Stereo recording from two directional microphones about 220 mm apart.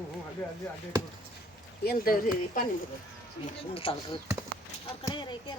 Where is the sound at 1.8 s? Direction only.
40° left (ahead or behind).